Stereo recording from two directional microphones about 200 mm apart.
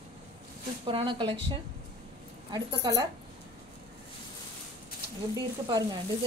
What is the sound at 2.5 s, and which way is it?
Speech, 20° right (ahead or behind).